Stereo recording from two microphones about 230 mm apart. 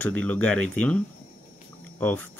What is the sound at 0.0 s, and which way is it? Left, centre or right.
Speech, centre.